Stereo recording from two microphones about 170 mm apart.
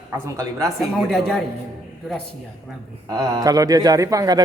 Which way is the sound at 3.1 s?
20° right (ahead or behind).